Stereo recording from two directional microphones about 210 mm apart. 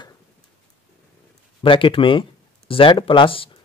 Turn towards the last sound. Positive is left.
turn(degrees=25)  # may be behind; listen again after turning